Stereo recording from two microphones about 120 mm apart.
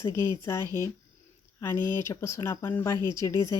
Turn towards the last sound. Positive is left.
turn(degrees=25)  # may be behind; listen again after turning